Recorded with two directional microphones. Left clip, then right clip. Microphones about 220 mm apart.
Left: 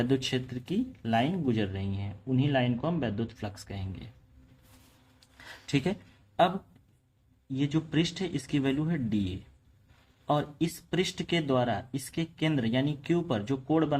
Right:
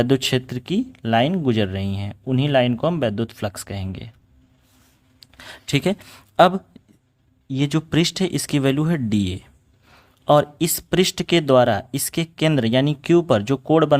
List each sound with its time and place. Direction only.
0.0 s speech: 55° right (ahead or behind)
5.2 s a sound: 45° right (ahead or behind)
7.4 s speech: 50° right (ahead or behind)